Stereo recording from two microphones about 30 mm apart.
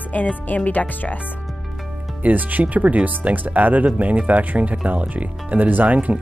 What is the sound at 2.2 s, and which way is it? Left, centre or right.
Speech, right.